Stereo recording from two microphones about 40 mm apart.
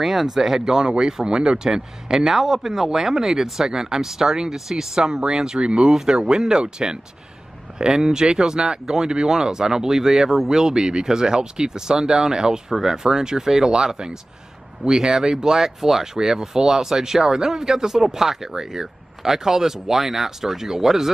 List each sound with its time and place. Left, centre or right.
0.0 s speech: centre